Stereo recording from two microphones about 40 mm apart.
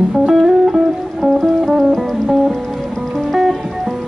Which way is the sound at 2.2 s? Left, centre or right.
Centre.